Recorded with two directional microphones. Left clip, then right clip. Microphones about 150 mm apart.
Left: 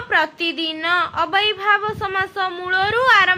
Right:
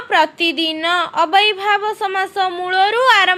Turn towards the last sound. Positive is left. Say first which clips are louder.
# right 2 dB
turn(degrees=-30)  # may be behind; listen again after turning